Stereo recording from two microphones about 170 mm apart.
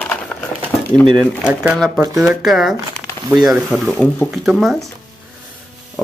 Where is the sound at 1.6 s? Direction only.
5° right (ahead or behind).